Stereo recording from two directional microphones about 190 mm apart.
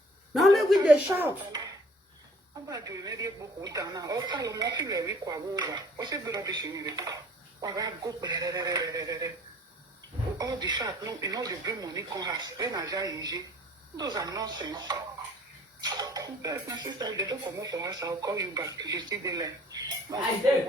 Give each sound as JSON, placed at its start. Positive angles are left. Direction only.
{"t": 0.3, "sound": "a sound", "side_deg": 0}
{"t": 2.6, "sound": "speech", "side_deg": -20}
{"t": 10.3, "sound": "speech", "side_deg": -20}